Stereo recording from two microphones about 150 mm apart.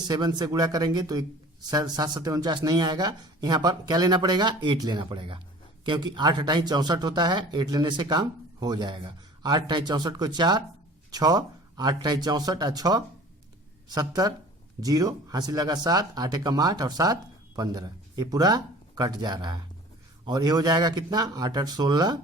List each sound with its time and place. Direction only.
0.1 s speech: 30° right (ahead or behind)